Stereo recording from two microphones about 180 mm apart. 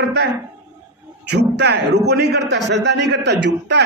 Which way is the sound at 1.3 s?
65° right (ahead or behind).